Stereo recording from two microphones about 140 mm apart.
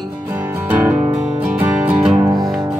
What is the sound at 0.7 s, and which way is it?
Music, 10° right (ahead or behind).